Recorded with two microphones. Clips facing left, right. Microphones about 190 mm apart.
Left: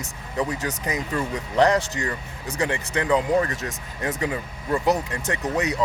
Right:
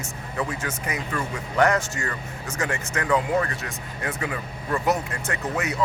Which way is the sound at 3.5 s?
40° left (ahead or behind).